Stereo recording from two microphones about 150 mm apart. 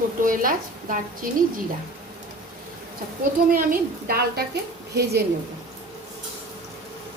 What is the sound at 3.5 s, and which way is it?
A woman's voice, 80° right.